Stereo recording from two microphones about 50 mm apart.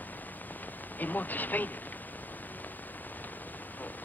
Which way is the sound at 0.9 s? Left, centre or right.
Left.